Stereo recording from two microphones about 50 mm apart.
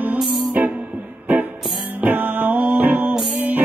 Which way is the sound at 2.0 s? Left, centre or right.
Right.